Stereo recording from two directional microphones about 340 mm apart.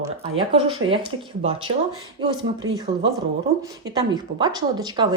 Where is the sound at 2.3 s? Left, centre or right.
Centre.